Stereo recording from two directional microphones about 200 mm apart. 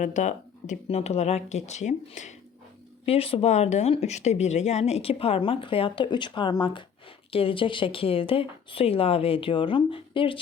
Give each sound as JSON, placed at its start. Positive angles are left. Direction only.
{"t": 0.0, "sound": "speech", "side_deg": 40}